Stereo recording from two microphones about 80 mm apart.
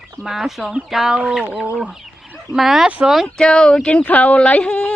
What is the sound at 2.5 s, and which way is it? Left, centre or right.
Speech, centre.